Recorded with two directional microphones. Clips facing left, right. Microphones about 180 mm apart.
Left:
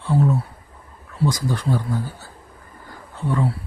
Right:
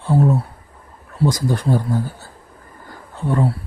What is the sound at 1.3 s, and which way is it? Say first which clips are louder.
Speech: right 4 dB; 40° right (ahead or behind).